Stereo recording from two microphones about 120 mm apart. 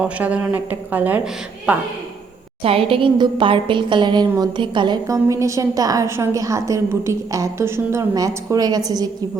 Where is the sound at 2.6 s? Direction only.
50° right (ahead or behind).